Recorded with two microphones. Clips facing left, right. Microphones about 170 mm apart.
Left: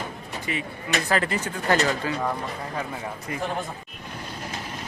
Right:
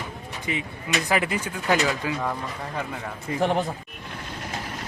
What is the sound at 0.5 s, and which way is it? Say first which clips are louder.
Speech: right 1 dB; 20° right (ahead or behind).